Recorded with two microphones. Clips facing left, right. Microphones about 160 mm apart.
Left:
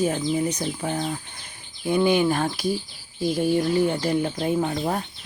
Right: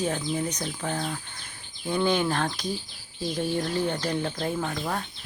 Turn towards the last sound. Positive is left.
turn(degrees=30)  # may be behind; listen again after turning